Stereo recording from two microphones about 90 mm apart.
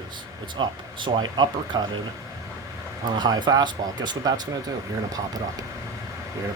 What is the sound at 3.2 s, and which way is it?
Speech, 55° right (ahead or behind).